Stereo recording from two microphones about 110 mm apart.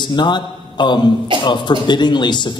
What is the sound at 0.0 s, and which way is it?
A man's voice, 45° left (ahead or behind).